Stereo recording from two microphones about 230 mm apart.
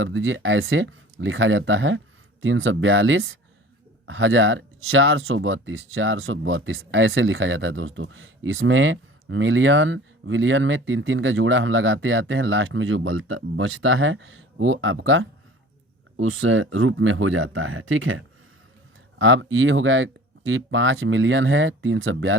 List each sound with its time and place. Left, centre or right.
0.0 s speech: right
19.2 s speech: right